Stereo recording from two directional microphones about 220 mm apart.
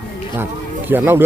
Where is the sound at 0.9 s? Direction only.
10° right (ahead or behind).